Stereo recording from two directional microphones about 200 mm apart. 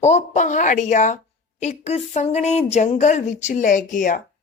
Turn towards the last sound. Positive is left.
turn(degrees=40)  # may be behind; listen again after turning